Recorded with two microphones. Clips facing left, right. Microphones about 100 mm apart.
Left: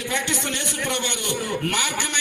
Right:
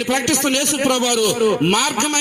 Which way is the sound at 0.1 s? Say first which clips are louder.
Right 9 dB; 90° right.